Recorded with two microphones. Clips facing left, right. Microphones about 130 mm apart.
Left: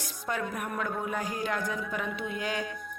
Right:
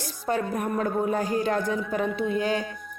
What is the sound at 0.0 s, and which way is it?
A woman's voice, 35° right (ahead or behind).